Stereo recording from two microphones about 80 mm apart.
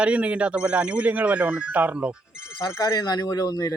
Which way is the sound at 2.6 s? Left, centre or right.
Left.